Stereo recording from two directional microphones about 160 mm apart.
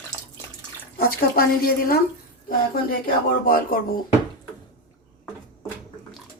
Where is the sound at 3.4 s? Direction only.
65° left (ahead or behind).